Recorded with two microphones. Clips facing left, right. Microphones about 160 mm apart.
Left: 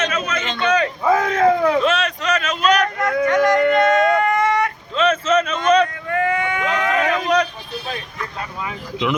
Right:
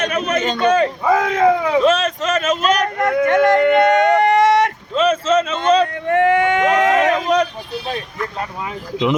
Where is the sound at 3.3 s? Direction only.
55° right (ahead or behind).